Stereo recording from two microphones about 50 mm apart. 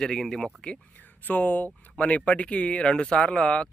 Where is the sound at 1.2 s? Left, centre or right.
Left.